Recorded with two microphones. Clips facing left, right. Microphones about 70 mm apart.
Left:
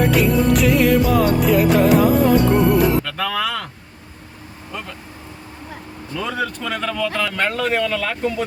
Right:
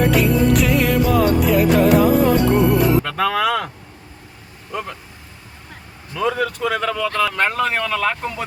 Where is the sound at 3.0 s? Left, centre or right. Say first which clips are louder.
Right 4 dB; centre.